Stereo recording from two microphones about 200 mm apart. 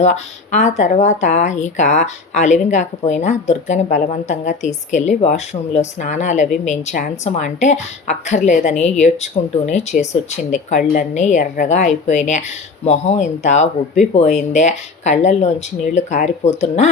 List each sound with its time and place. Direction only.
0.0 s a woman's voice: 35° left (ahead or behind)